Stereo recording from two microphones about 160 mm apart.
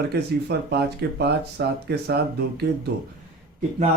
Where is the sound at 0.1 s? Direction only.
90° right.